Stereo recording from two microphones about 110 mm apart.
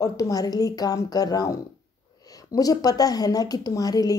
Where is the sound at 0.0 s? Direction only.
35° left (ahead or behind).